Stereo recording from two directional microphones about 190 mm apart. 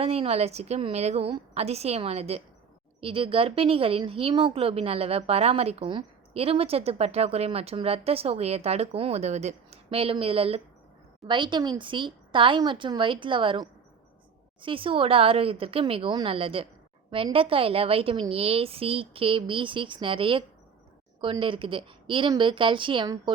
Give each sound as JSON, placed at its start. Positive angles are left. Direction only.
{"t": 0.0, "sound": "a woman's voice", "side_deg": -30}